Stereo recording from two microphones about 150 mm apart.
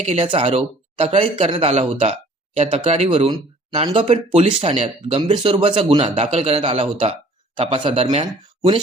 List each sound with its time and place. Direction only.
0.0 s speech: 45° right (ahead or behind)